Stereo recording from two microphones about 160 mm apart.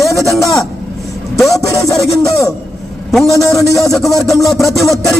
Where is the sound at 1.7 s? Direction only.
20° left (ahead or behind).